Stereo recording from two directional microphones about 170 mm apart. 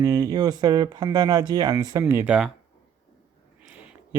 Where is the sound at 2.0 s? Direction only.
10° right (ahead or behind).